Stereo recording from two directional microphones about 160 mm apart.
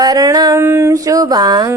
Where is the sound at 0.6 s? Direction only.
15° right (ahead or behind).